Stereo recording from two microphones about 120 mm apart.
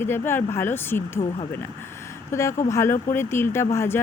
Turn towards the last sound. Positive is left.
turn(degrees=20)  # may be behind; listen again after turning